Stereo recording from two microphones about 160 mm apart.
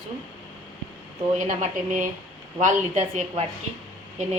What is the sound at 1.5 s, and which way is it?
A woman's voice, 50° right (ahead or behind).